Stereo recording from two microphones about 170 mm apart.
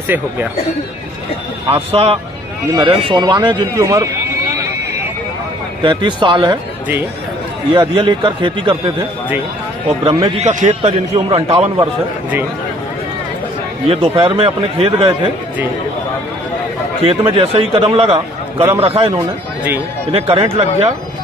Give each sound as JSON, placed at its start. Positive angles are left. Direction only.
{"t": 1.7, "sound": "a man's voice", "side_deg": -35}
{"t": 5.8, "sound": "a man's voice", "side_deg": -30}
{"t": 7.7, "sound": "a man's voice", "side_deg": -30}
{"t": 10.0, "sound": "a man's voice", "side_deg": -35}
{"t": 11.8, "sound": "a man's voice", "side_deg": -10}
{"t": 13.8, "sound": "a man's voice", "side_deg": -35}
{"t": 17.0, "sound": "a man's voice", "side_deg": -35}
{"t": 19.1, "sound": "a man's voice", "side_deg": -10}
{"t": 20.1, "sound": "a man's voice", "side_deg": -35}